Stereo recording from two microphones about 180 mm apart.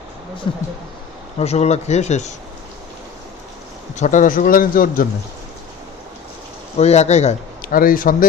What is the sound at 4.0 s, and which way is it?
A man's voice, 45° left (ahead or behind).